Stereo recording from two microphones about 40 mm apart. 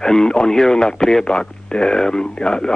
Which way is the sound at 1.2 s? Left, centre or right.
Left.